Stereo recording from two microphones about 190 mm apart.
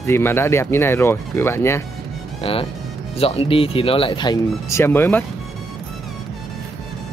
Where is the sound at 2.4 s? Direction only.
30° left (ahead or behind).